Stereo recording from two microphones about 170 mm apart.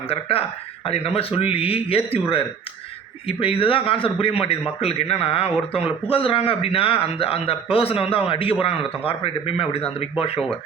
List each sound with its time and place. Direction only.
0.1 s a man's voice: 35° left (ahead or behind)